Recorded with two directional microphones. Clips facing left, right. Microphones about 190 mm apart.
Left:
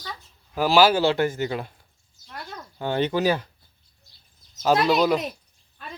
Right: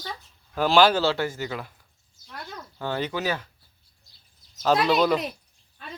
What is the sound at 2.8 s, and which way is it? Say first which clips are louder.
Speech: left 5 dB; 20° left (ahead or behind).